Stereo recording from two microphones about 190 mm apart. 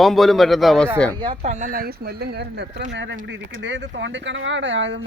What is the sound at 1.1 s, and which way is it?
A man's voice, 25° right (ahead or behind).